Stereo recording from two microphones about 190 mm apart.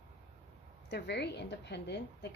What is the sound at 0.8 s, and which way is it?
Speech, 60° left (ahead or behind).